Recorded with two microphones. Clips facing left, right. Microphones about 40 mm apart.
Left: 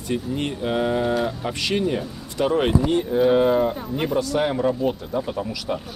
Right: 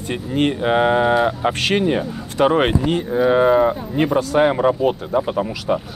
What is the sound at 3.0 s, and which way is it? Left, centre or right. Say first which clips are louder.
Speech: right 4 dB; centre.